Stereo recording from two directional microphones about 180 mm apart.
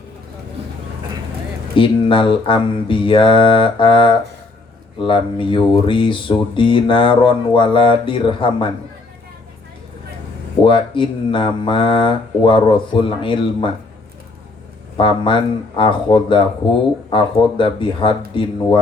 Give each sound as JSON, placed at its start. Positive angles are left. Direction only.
{"t": 1.7, "sound": "speech", "side_deg": 30}
{"t": 10.6, "sound": "speech", "side_deg": 30}
{"t": 14.9, "sound": "speech", "side_deg": 30}